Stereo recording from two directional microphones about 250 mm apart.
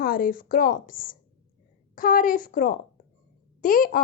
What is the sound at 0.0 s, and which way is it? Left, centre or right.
A woman's voice, left.